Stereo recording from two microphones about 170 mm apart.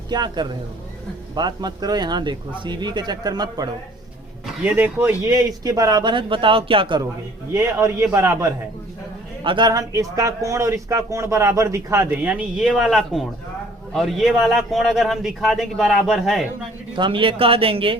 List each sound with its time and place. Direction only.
0.1 s speech: 25° right (ahead or behind)
4.6 s speech: 10° right (ahead or behind); by 7.0 s 30° right (ahead or behind)
7.5 s speech: 20° right (ahead or behind)
9.4 s a man's voice: 25° right (ahead or behind); by 16.5 s centre (ahead or behind)
16.9 s speech: 30° right (ahead or behind)